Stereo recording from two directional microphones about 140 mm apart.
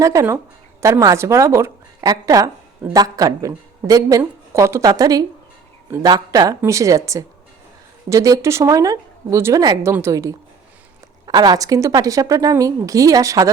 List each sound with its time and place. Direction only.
0.0 s a woman's voice: 20° right (ahead or behind)